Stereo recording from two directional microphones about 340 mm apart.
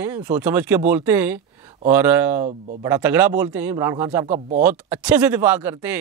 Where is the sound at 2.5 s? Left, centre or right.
Centre.